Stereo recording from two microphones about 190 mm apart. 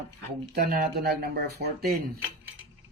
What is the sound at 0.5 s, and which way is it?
Speech, 55° right (ahead or behind).